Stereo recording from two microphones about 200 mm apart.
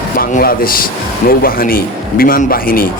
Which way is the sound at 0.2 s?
45° left (ahead or behind).